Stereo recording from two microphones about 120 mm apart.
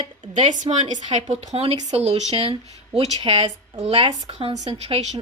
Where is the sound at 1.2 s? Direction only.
60° right (ahead or behind).